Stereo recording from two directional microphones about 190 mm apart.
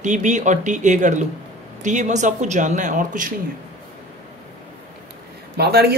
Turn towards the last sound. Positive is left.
turn(degrees=-55)  # may be behind; listen again after turning